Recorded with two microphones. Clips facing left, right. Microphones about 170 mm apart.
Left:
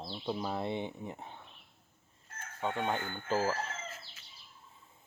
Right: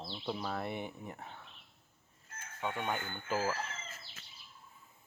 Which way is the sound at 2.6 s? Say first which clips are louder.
Left 3 dB; 25° left (ahead or behind).